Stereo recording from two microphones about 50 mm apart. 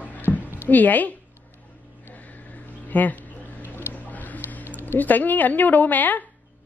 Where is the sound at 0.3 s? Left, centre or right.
Left.